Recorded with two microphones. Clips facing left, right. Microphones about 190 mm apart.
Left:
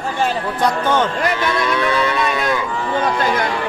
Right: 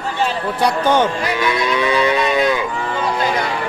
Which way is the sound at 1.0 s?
10° right (ahead or behind).